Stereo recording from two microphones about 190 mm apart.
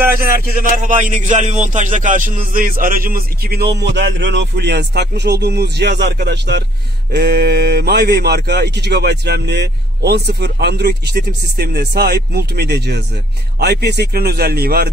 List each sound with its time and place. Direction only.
0.2 s a man's voice: 45° right (ahead or behind)